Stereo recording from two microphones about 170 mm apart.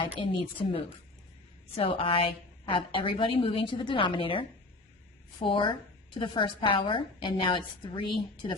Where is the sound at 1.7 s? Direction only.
30° left (ahead or behind).